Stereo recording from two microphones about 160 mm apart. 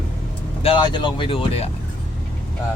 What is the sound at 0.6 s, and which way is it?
Speech, 30° left (ahead or behind).